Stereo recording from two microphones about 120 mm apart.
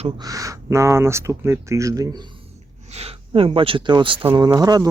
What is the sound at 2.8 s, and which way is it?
Speech, 60° right (ahead or behind).